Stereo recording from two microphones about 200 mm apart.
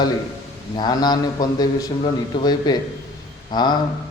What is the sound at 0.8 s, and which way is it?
A man's voice, 20° left (ahead or behind).